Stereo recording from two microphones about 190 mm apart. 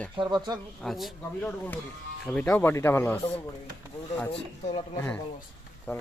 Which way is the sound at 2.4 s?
15° left (ahead or behind).